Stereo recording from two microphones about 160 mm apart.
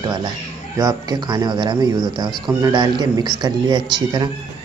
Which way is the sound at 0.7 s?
20° right (ahead or behind).